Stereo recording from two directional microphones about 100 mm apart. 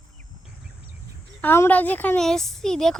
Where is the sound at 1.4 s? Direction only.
20° left (ahead or behind).